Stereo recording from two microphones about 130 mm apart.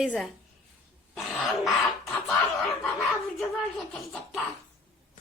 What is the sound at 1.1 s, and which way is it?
Dog, centre (ahead or behind).